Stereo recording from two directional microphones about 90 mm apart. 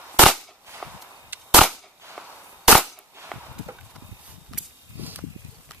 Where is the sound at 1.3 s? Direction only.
20° right (ahead or behind).